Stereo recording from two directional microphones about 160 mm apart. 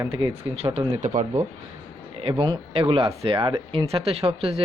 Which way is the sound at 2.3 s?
25° right (ahead or behind).